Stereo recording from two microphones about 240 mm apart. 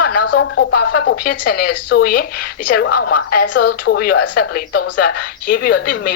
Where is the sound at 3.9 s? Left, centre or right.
Left.